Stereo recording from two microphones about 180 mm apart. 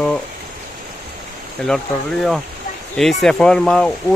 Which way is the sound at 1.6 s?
5° left (ahead or behind).